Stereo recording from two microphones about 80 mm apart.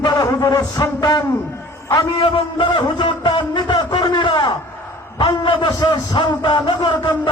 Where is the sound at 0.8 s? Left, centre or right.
Left.